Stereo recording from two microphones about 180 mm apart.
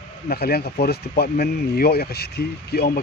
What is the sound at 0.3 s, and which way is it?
Speech, 60° left (ahead or behind).